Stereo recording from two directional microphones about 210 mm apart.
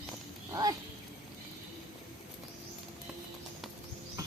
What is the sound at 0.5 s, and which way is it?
Speech, 15° right (ahead or behind).